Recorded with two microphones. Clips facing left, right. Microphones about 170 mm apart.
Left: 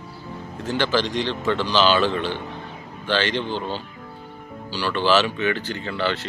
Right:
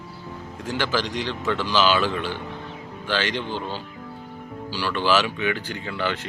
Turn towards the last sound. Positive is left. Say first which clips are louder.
# left 2 dB
turn(degrees=-15)  # may be behind; listen again after turning